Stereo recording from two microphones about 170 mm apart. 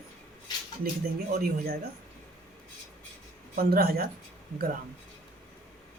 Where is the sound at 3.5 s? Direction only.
65° right (ahead or behind).